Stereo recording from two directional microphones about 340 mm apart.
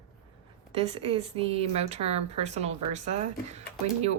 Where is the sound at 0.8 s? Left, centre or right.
Centre.